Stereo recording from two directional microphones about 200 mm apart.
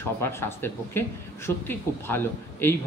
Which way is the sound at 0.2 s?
10° left (ahead or behind).